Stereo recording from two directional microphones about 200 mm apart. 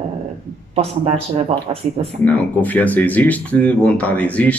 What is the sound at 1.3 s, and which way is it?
Speech, 30° right (ahead or behind).